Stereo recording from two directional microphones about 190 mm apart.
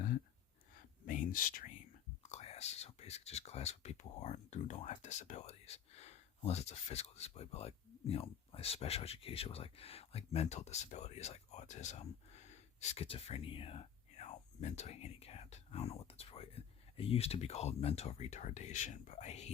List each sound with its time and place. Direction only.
1.0 s speech: 45° left (ahead or behind)
2.3 s speech: 35° left (ahead or behind)